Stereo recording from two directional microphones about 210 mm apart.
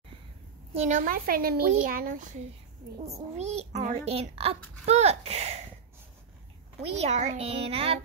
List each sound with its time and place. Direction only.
0.7 s a child's voice: 35° right (ahead or behind)
6.8 s speech: 30° right (ahead or behind)